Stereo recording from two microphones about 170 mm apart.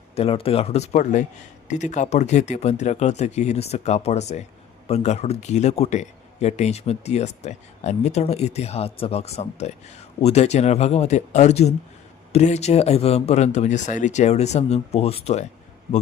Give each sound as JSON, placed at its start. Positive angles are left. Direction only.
{"t": 0.2, "sound": "speech", "side_deg": 35}